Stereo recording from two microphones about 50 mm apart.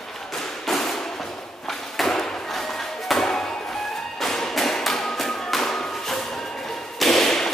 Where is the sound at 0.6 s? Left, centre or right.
Centre.